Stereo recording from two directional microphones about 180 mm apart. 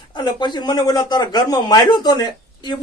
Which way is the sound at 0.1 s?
25° left (ahead or behind).